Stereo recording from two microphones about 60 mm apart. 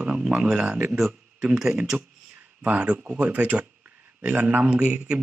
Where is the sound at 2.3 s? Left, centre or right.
Right.